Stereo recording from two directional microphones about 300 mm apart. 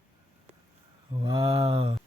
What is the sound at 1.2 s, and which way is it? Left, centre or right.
Speech, centre.